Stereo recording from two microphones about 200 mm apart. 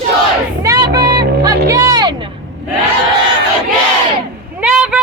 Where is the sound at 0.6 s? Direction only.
15° right (ahead or behind).